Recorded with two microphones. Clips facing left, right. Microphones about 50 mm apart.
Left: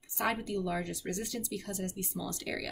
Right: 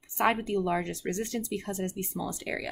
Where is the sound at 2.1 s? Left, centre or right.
Right.